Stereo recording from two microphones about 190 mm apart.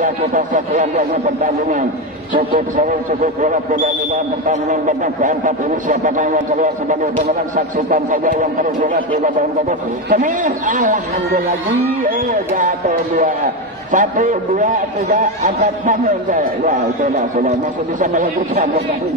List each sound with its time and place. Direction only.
0.0 s a man's voice: 40° right (ahead or behind)
12.5 s a man's voice: 45° right (ahead or behind)